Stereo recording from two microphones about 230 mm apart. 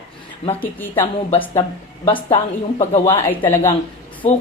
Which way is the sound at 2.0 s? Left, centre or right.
Left.